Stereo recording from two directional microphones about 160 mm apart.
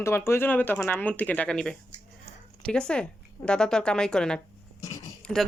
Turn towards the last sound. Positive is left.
turn(degrees=5)  # may be behind; listen again after turning